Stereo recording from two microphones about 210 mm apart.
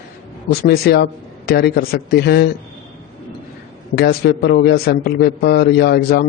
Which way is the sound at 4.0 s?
50° left (ahead or behind).